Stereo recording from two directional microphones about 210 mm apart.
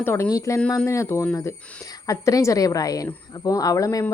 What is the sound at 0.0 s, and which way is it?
A woman's voice, 10° left (ahead or behind).